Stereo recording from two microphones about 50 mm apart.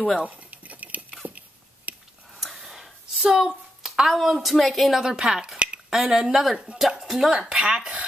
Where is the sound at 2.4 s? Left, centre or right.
Centre.